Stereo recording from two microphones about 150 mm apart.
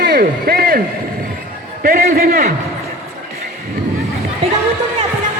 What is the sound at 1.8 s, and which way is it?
Speech, 70° right (ahead or behind).